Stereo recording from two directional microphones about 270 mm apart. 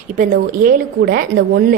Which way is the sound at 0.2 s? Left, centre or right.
Right.